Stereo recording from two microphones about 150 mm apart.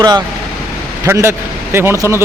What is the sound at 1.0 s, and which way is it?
Speech, 15° right (ahead or behind).